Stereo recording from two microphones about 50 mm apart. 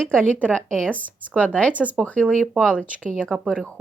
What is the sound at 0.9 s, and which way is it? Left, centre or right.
Speech, left.